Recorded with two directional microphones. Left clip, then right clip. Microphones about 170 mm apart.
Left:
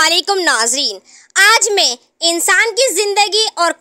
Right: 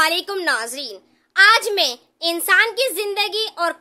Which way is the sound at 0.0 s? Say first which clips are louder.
Left 6 dB; 50° left (ahead or behind).